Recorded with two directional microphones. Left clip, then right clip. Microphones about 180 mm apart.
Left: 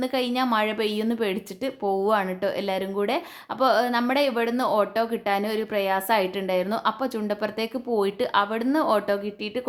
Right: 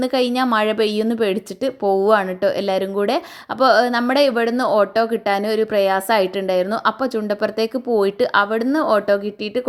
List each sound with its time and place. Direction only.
0.0 s a woman's voice: 30° right (ahead or behind)